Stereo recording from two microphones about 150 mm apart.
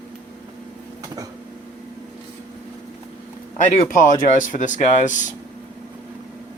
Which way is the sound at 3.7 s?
60° left (ahead or behind).